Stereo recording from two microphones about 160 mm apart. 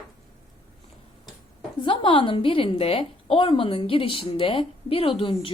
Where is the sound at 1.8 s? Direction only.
30° left (ahead or behind).